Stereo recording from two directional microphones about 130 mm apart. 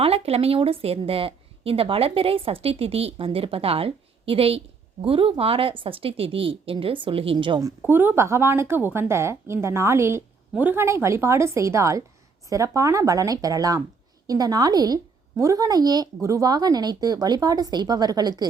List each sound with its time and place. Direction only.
0.0 s a woman's voice: 50° right (ahead or behind)
7.8 s a woman's voice: 15° right (ahead or behind)